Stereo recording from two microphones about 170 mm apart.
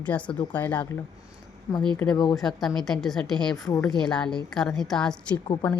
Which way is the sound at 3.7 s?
20° left (ahead or behind).